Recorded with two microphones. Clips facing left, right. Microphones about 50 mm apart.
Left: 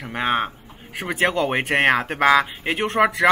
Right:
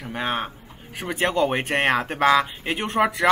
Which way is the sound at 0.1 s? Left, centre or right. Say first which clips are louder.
Left 4 dB; left.